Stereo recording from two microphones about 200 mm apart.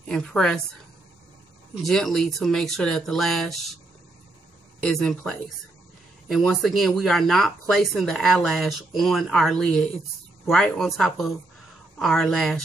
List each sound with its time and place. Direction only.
0.1 s speech: 5° left (ahead or behind)
1.8 s speech: centre (ahead or behind)
4.8 s speech: 5° left (ahead or behind)